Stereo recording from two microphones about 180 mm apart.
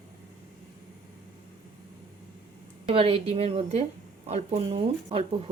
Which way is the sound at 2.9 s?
30° right (ahead or behind).